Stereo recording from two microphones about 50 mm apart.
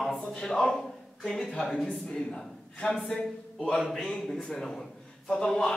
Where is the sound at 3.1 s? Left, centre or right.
Centre.